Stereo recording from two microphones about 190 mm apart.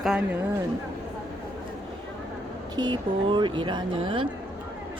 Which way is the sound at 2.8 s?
25° right (ahead or behind).